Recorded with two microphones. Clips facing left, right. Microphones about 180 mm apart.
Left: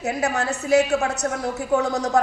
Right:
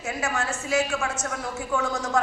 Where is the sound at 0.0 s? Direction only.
40° left (ahead or behind).